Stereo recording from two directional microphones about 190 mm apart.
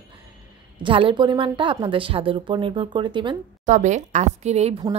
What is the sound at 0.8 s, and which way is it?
A woman's voice, 25° right (ahead or behind).